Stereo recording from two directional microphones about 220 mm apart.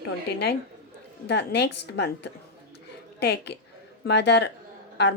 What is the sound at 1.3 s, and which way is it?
Speech, 50° left (ahead or behind).